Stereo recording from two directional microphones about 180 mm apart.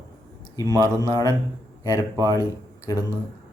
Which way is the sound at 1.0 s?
20° left (ahead or behind).